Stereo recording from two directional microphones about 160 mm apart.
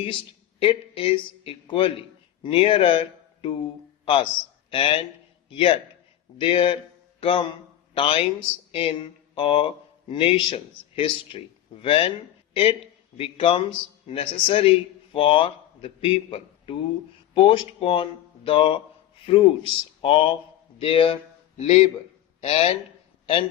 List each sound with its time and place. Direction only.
0.6 s a man's voice: 35° left (ahead or behind)
13.1 s a man's voice: 35° left (ahead or behind)